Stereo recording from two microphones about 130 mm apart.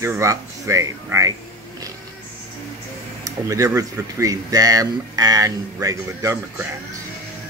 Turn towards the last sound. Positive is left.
turn(degrees=-20)  # may be behind; listen again after turning